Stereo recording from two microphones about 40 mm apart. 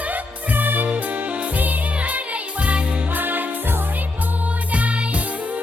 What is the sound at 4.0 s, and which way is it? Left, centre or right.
Music, right.